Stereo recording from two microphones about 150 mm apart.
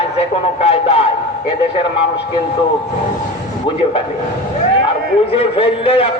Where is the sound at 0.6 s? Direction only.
40° left (ahead or behind).